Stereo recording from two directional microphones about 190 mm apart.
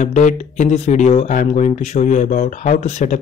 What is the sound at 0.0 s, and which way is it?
Speech, 40° left (ahead or behind).